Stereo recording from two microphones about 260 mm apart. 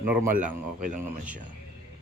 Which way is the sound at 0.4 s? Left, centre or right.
Right.